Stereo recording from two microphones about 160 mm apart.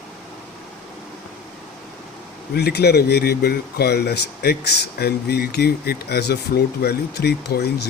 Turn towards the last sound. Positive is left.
turn(degrees=90)